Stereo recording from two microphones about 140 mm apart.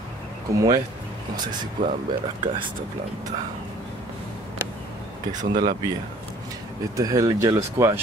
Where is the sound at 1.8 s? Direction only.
35° right (ahead or behind).